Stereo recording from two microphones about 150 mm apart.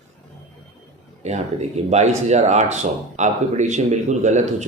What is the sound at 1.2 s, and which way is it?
Speech, 50° right (ahead or behind).